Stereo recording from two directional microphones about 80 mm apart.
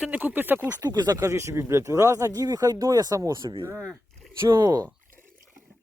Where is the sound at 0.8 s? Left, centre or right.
Right.